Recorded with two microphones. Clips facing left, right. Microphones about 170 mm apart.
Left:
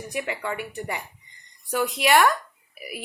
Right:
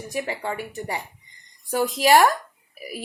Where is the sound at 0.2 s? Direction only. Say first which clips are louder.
Right 1 dB; 35° right (ahead or behind).